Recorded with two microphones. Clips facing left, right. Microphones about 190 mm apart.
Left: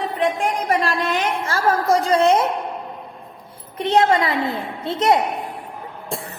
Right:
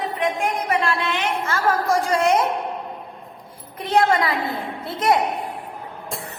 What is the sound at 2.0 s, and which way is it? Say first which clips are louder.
Speech: left 3 dB; 20° left (ahead or behind).